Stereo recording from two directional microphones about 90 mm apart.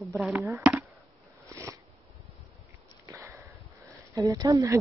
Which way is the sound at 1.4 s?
35° right (ahead or behind).